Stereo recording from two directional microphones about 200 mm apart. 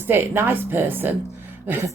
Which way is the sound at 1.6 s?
10° right (ahead or behind).